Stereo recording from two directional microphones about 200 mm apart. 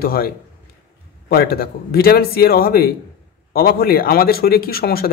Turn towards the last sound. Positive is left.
turn(degrees=50)  # may be behind; listen again after turning